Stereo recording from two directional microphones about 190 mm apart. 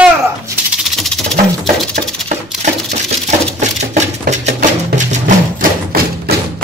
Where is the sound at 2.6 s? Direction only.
35° right (ahead or behind).